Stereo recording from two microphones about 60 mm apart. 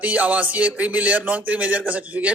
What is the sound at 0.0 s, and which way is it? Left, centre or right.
Speech, right.